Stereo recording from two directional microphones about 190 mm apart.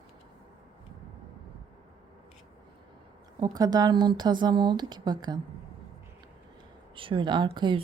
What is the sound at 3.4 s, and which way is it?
Speech, 20° right (ahead or behind).